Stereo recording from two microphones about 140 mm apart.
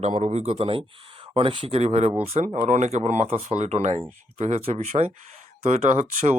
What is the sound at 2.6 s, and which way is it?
Speech, 60° right (ahead or behind).